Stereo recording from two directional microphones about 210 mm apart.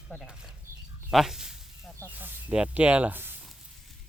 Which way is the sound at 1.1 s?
Centre (ahead or behind).